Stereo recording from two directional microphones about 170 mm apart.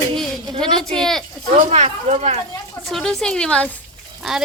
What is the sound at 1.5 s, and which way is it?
Speech, 40° right (ahead or behind).